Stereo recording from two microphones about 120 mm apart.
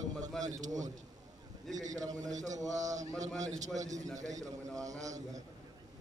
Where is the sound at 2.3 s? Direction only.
90° right.